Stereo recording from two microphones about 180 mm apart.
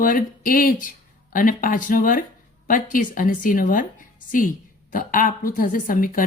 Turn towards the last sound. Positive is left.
turn(degrees=50)  # may be behind; listen again after turning